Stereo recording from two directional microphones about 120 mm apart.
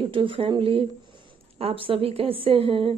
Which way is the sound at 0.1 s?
45° right (ahead or behind).